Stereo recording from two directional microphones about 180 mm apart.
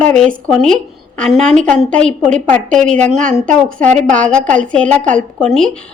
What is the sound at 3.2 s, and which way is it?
Speech, 45° right (ahead or behind).